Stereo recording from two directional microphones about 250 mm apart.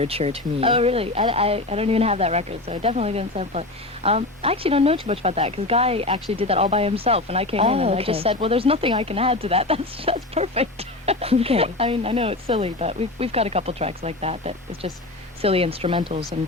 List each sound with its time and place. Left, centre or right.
0.0 s speech: right